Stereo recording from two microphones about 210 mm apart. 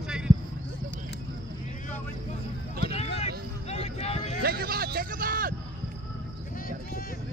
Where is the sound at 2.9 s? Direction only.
30° left (ahead or behind).